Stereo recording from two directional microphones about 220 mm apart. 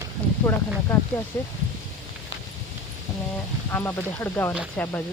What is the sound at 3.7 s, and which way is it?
Speech, 10° left (ahead or behind).